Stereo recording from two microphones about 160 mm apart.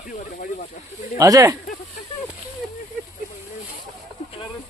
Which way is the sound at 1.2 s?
20° right (ahead or behind).